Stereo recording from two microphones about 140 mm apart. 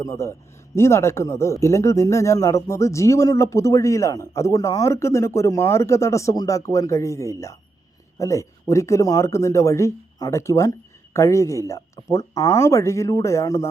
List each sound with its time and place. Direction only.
0.0 s a man's voice: 20° left (ahead or behind)